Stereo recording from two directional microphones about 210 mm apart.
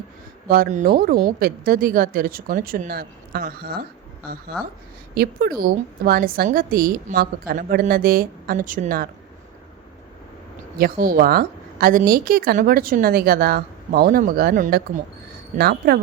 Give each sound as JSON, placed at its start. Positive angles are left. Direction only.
{"t": 0.4, "sound": "a woman's voice", "side_deg": -45}
{"t": 5.1, "sound": "a woman's voice", "side_deg": -50}
{"t": 10.8, "sound": "a woman's voice", "side_deg": -45}